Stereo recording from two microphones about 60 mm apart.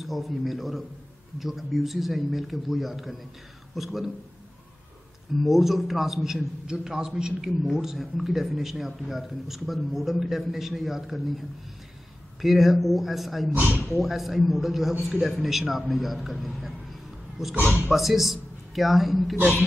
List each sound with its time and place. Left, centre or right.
0.0 s a man's voice: centre
5.3 s a man's voice: centre
13.6 s speech: right
13.8 s a man's voice: centre